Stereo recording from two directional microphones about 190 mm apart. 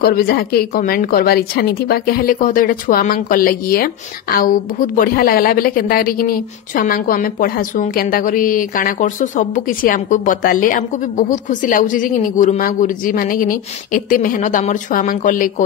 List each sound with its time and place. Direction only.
0.0 s a woman's voice: 50° left (ahead or behind)